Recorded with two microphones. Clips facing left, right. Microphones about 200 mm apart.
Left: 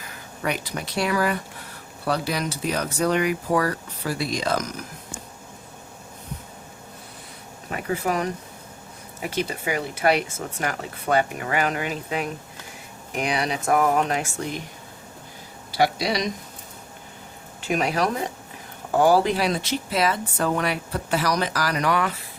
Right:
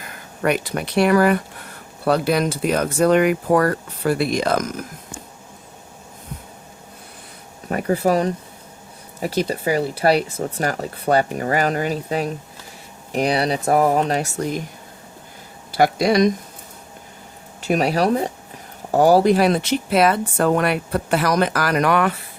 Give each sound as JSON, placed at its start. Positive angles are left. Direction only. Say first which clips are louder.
{"t": 0.4, "sound": "speech", "louder": "right 7 dB", "side_deg": -55}
{"t": 7.7, "sound": "speech", "louder": "right 7 dB", "side_deg": -40}
{"t": 15.7, "sound": "speech", "louder": "right 6 dB", "side_deg": -50}
{"t": 17.6, "sound": "speech", "louder": "right 5 dB", "side_deg": -40}